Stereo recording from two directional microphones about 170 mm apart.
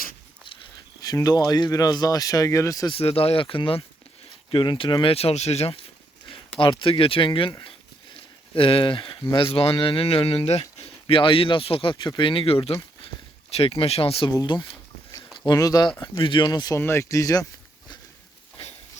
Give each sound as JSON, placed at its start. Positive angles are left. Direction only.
{"t": 1.0, "sound": "speech", "side_deg": 20}
{"t": 2.9, "sound": "speech", "side_deg": 35}
{"t": 8.5, "sound": "speech", "side_deg": 30}